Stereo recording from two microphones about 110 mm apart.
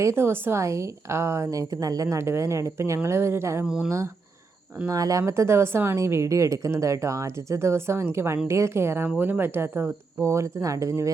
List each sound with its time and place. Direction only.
0.0 s a woman's voice: 25° right (ahead or behind)